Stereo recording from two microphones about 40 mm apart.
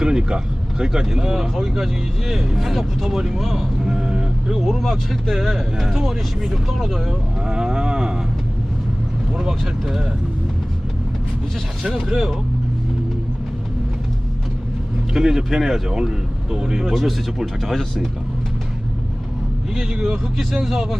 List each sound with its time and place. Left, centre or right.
0.0 s speech: centre
3.9 s vehicle: right
4.5 s speech: centre
9.3 s vehicle: centre
11.8 s speech: centre
15.1 s speech: centre
15.9 s speech: centre
16.9 s speech: centre
19.7 s speech: centre